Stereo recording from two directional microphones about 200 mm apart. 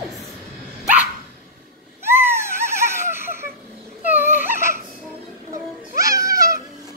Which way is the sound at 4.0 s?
10° right (ahead or behind).